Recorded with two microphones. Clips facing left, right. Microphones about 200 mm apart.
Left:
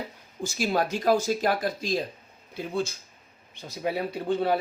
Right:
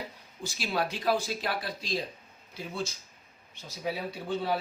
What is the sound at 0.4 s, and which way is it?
Speech, 45° left (ahead or behind).